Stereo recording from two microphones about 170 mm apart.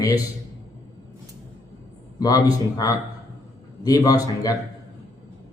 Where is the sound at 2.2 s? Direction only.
20° left (ahead or behind).